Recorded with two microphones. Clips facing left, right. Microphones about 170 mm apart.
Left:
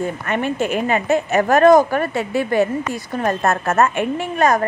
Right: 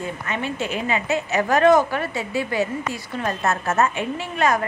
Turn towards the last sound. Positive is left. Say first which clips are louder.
# left 4 dB
turn(degrees=45)  # may be behind; listen again after turning